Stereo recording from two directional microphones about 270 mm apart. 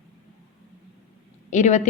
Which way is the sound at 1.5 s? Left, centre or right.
Left.